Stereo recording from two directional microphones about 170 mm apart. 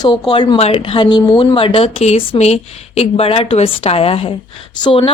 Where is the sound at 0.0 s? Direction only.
25° left (ahead or behind).